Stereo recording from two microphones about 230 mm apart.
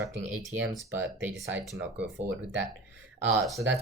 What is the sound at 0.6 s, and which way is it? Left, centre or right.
Speech, centre.